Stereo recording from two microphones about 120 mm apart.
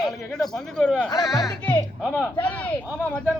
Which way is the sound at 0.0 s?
Centre (ahead or behind).